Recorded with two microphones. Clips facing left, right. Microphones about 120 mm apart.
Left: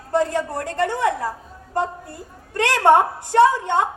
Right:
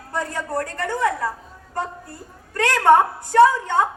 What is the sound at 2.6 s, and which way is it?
A woman's voice, 30° left (ahead or behind).